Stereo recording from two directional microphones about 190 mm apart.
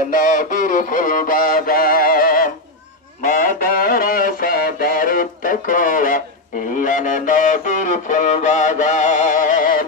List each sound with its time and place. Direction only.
0.1 s music: 45° left (ahead or behind)